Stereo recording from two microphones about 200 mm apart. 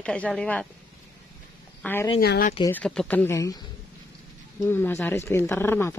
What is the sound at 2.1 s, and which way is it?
Speech, 50° left (ahead or behind).